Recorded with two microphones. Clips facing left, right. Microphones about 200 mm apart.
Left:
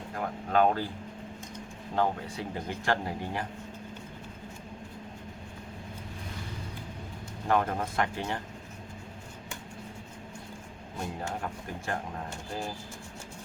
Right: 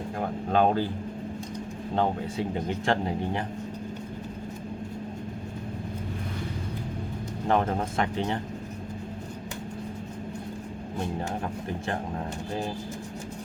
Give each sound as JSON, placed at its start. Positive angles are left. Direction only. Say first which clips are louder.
{"t": 0.5, "sound": "speech", "louder": "right 2 dB", "side_deg": -25}
{"t": 2.0, "sound": "speech", "louder": "right 2 dB", "side_deg": -25}
{"t": 7.4, "sound": "speech", "louder": "right 2 dB", "side_deg": -25}